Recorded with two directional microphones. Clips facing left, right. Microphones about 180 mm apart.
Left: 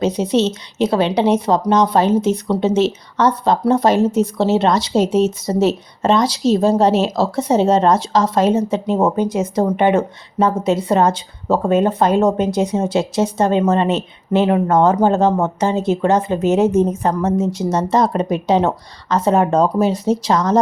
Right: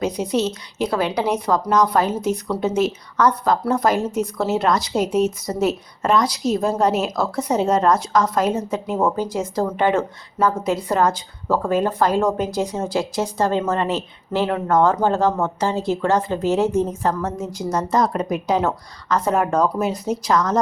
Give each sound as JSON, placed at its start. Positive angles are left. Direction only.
{"t": 0.0, "sound": "a woman's voice", "side_deg": 25}